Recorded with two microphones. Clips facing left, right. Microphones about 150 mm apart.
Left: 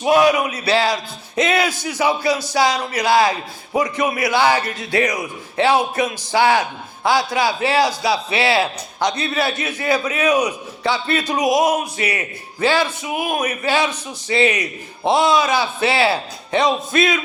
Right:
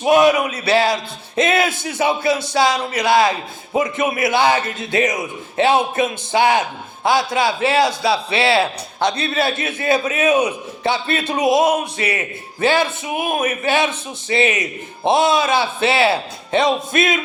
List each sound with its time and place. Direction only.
0.0 s a man's voice: 25° right (ahead or behind)